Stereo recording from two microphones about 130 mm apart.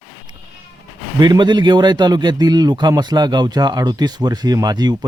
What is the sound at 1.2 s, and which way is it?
A man's voice, 35° right (ahead or behind).